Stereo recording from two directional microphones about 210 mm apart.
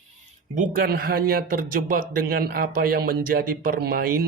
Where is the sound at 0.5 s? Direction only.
40° right (ahead or behind).